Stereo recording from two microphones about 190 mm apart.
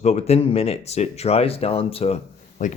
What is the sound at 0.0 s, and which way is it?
Speech, 35° left (ahead or behind).